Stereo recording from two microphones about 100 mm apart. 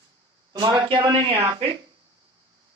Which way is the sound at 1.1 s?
75° right (ahead or behind).